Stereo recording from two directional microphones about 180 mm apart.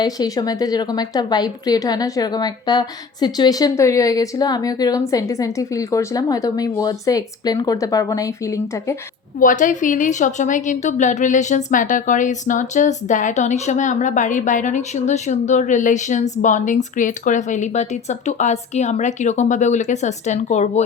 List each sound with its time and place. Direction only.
0.0 s a woman's voice: 20° left (ahead or behind)
9.4 s a woman's voice: 45° left (ahead or behind)